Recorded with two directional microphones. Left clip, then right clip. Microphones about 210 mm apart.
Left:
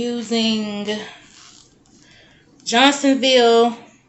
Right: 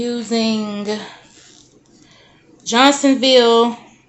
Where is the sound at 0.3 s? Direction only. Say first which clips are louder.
Even; 20° right (ahead or behind).